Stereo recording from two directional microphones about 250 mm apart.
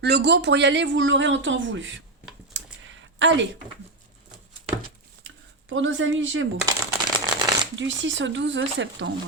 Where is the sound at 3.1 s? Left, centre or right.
Right.